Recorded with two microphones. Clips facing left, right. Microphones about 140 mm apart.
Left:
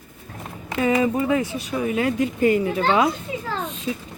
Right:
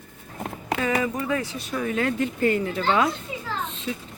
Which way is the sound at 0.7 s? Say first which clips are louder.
Left 6 dB; 25° left (ahead or behind).